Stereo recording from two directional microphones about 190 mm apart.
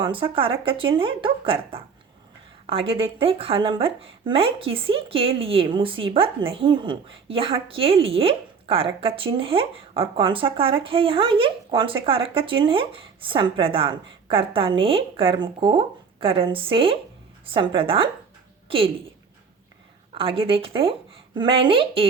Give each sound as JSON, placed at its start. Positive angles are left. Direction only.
{"t": 0.0, "sound": "a woman's voice", "side_deg": -25}
{"t": 20.1, "sound": "a woman's voice", "side_deg": -30}